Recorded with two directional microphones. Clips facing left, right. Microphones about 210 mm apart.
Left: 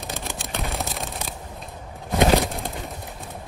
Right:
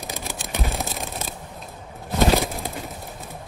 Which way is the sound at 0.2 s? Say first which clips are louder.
Right 3 dB; centre (ahead or behind).